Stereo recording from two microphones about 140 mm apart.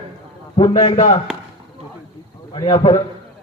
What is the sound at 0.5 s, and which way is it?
Speech, 35° left (ahead or behind).